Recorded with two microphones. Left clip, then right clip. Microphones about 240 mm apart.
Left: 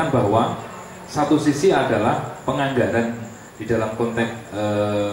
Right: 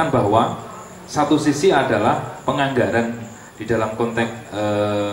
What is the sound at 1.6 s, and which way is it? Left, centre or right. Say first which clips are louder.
Speech: right 3 dB; centre.